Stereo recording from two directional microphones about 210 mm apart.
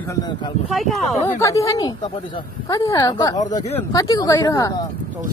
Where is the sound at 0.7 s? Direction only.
Centre (ahead or behind).